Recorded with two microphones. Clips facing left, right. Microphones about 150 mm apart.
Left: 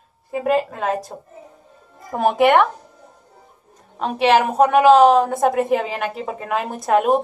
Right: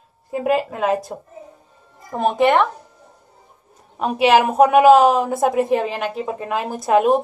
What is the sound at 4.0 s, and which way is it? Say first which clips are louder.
A woman's voice: right 1 dB; 10° right (ahead or behind).